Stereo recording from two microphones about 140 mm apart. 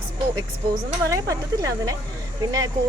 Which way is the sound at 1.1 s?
25° right (ahead or behind).